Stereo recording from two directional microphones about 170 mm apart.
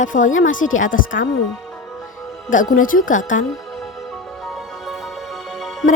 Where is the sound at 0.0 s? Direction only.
50° left (ahead or behind).